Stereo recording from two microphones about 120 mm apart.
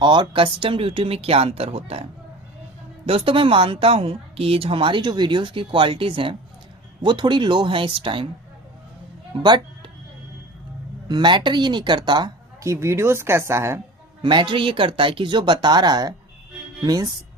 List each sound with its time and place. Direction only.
0.0 s a woman's voice: 40° right (ahead or behind); by 2.0 s 55° right (ahead or behind)
3.1 s a woman's voice: 50° right (ahead or behind)
9.3 s a sound: 40° right (ahead or behind)
11.1 s speech: 40° right (ahead or behind)
12.6 s speech: 25° right (ahead or behind)
14.2 s speech: 40° right (ahead or behind)